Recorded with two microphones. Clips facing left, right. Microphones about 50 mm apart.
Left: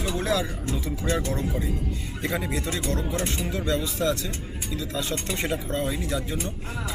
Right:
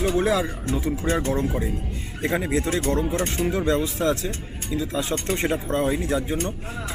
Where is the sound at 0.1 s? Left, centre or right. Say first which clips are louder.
Right 4 dB; right.